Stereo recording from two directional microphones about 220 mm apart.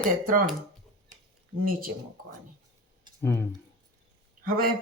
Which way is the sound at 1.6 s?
40° right (ahead or behind).